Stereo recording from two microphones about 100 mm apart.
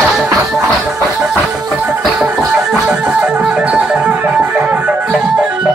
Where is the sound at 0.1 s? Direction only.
5° right (ahead or behind).